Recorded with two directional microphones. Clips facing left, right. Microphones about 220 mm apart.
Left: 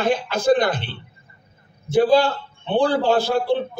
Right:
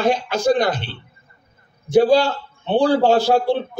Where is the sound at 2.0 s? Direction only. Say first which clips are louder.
Even; 55° left (ahead or behind).